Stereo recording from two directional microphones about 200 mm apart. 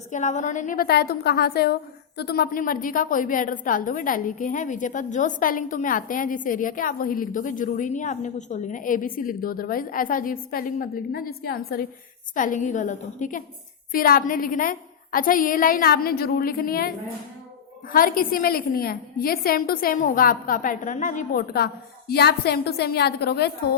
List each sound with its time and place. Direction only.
0.1 s a woman's voice: 35° left (ahead or behind)
17.9 s a woman's voice: 45° left (ahead or behind)